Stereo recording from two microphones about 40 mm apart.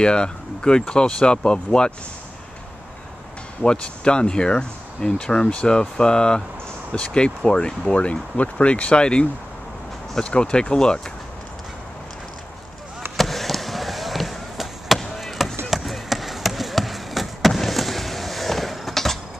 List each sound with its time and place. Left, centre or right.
0.0 s speech: left
3.6 s speech: left
13.2 s basketball bounce: centre
15.4 s chop: centre
15.7 s basketball bounce: centre